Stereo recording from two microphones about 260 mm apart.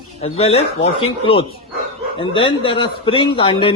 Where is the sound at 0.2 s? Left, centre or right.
Left.